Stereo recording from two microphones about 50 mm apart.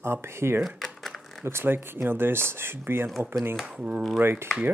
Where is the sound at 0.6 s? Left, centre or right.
Centre.